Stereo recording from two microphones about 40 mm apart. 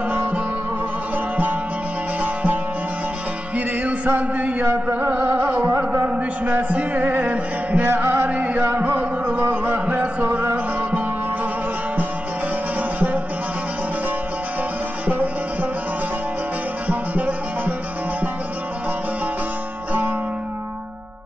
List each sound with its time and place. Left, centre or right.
1.3 s music: right
5.2 s music: right
5.9 s a sound: right
6.7 s music: right
8.3 s music: right
8.8 s music: right
10.5 s music: right